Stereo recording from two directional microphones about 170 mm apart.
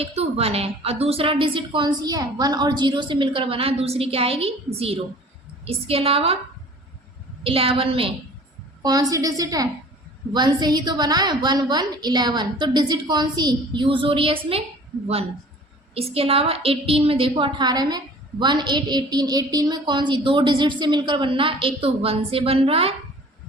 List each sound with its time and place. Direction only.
0.0 s a woman's voice: 35° right (ahead or behind)
7.4 s a woman's voice: 35° right (ahead or behind)
16.0 s a woman's voice: 35° right (ahead or behind)